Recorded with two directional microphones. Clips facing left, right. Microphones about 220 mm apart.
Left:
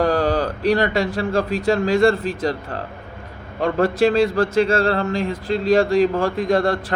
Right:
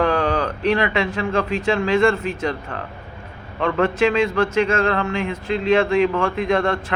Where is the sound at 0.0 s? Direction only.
35° left (ahead or behind).